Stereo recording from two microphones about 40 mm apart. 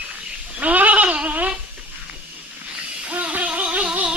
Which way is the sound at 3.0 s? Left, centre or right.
Right.